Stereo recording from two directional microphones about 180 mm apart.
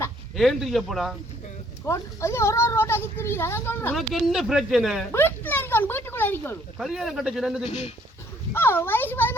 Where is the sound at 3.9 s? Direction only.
Centre (ahead or behind).